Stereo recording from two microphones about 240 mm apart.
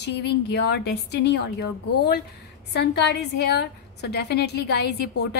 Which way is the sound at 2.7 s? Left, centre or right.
Left.